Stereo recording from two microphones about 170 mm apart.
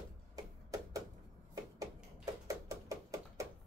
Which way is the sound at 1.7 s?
20° right (ahead or behind).